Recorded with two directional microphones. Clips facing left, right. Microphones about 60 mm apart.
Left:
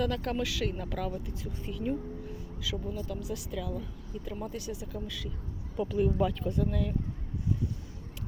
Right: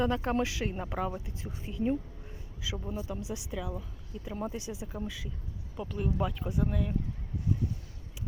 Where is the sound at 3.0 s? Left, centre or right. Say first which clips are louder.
Left 1 dB; centre.